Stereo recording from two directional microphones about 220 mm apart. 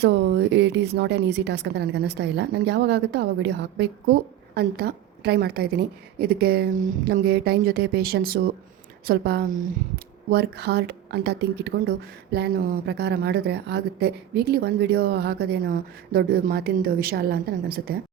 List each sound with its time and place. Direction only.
0.0 s speech: 50° right (ahead or behind)